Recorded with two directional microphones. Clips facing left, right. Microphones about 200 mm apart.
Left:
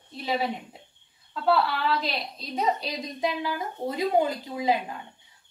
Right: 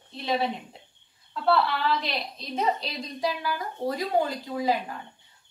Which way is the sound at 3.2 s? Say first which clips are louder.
Left 1 dB; 20° left (ahead or behind).